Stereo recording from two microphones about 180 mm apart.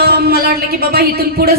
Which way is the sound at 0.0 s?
60° right (ahead or behind).